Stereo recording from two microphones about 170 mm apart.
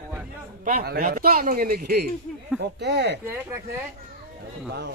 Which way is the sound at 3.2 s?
15° right (ahead or behind).